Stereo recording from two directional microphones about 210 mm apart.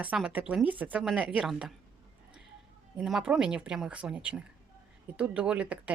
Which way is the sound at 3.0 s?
Centre (ahead or behind).